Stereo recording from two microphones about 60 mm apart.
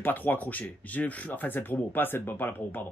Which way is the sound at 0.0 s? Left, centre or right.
Left.